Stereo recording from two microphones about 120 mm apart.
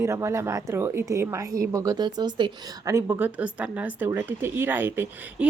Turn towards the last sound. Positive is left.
turn(degrees=-20)  # may be behind; listen again after turning